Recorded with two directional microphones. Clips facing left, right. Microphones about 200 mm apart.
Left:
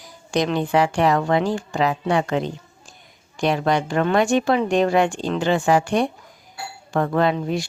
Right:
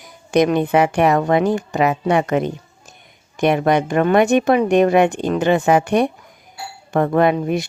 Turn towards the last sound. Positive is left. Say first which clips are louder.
# right 4 dB
turn(degrees=-20)  # may be behind; listen again after turning